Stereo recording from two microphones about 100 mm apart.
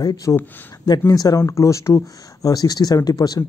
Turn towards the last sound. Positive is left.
turn(degrees=40)  # may be behind; listen again after turning